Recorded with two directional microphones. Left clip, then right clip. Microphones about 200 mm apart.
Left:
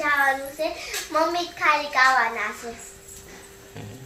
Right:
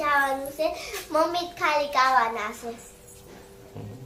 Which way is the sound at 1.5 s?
15° right (ahead or behind).